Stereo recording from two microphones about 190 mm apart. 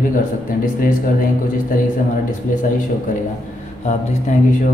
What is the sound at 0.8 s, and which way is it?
Speech, 45° left (ahead or behind).